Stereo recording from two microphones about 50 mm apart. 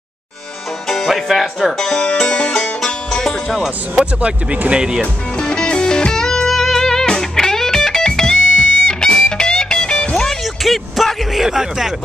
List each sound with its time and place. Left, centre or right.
1.0 s speech: centre
3.2 s music: centre
3.4 s speech: centre
5.0 s music: centre
10.4 s a sound: centre